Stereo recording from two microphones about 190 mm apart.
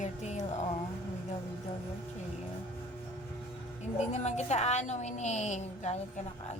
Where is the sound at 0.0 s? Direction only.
40° left (ahead or behind).